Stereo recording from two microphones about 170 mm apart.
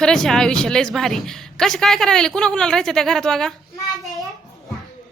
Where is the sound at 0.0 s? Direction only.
Centre (ahead or behind).